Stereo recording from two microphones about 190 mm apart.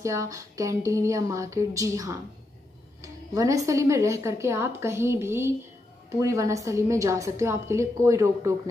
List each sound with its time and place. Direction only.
0.0 s a woman's voice: 15° right (ahead or behind)